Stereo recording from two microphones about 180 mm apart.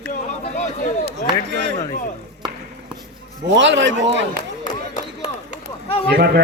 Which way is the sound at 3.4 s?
90° right.